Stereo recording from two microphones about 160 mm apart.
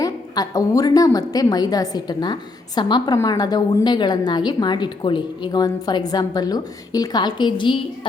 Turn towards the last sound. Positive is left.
turn(degrees=30)  # may be behind; listen again after turning